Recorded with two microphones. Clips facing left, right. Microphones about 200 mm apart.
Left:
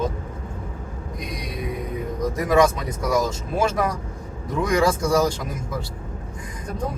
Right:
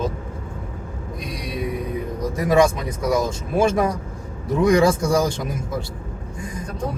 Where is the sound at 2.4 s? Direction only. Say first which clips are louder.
Right 1 dB; 25° right (ahead or behind).